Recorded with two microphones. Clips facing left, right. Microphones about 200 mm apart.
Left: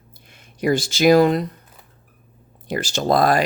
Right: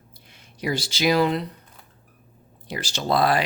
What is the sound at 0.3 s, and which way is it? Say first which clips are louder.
Speech: left 8 dB; 50° left (ahead or behind).